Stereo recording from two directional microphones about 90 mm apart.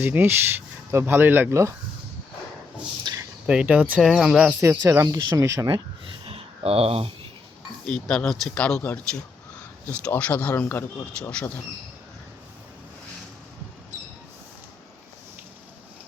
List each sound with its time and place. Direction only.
0.0 s speech: 25° right (ahead or behind)
3.1 s a sound: 50° right (ahead or behind)
3.4 s speech: 10° right (ahead or behind)
4.6 s speech: 35° right (ahead or behind)
6.2 s a sound: 90° right
7.9 s speech: 10° left (ahead or behind)
10.1 s speech: 15° left (ahead or behind)
10.5 s speech: 25° left (ahead or behind)
11.2 s speech: 10° left (ahead or behind)